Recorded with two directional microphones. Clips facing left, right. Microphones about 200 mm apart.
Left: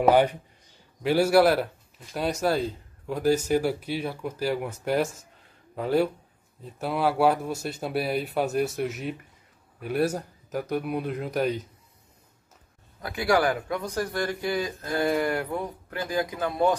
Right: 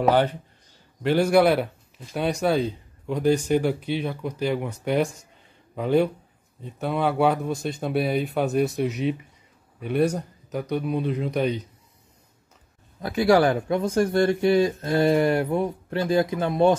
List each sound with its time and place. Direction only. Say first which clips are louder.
0.0 s speech: left 1 dB; 10° left (ahead or behind)
13.0 s speech: right 5 dB; 25° right (ahead or behind)